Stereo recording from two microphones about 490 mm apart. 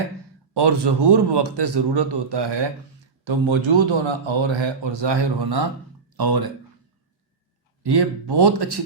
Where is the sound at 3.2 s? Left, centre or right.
Right.